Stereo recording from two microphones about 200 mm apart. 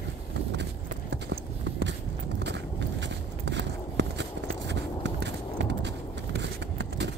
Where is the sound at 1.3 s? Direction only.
60° right (ahead or behind).